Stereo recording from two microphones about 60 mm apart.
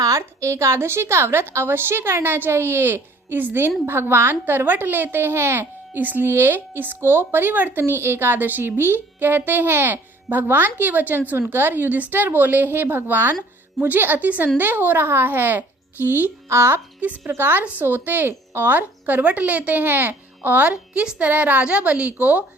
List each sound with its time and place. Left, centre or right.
0.2 s a woman's voice: right
16.5 s a child's voice: right
16.7 s speech: right
17.2 s speech: right
20.7 s a woman's voice: centre